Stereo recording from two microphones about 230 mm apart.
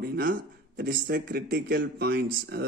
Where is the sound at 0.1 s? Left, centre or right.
Right.